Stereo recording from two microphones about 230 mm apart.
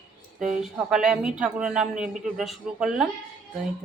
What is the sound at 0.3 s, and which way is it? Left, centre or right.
Speech, centre.